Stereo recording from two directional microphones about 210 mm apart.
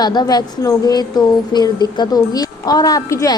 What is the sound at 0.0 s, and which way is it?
A woman's voice, 20° left (ahead or behind).